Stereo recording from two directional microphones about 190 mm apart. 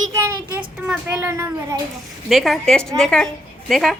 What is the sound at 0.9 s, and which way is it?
Speech, 10° right (ahead or behind).